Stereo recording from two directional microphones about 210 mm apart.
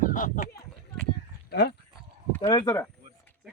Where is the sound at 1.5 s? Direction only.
50° left (ahead or behind).